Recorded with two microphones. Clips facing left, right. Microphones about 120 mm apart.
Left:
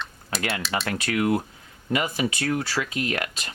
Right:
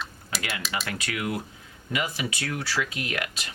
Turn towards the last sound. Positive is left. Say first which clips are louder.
# left 3 dB
turn(degrees=40)  # may be behind; listen again after turning